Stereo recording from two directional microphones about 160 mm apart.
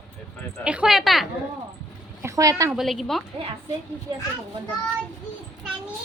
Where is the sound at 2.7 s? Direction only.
Centre (ahead or behind).